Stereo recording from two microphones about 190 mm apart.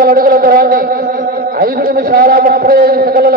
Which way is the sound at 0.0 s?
50° right (ahead or behind).